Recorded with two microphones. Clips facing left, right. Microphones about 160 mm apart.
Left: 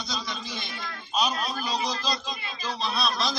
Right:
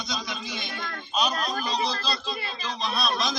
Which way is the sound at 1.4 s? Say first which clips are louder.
Right 2 dB; 40° right (ahead or behind).